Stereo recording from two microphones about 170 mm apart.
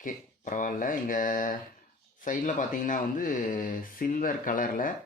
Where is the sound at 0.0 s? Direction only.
50° left (ahead or behind).